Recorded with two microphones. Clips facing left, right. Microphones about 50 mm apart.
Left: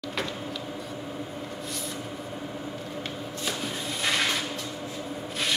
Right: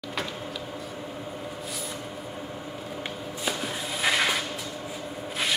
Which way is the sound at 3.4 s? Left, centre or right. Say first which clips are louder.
Right 2 dB; centre.